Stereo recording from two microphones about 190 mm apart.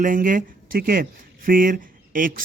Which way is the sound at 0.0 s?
45° right (ahead or behind).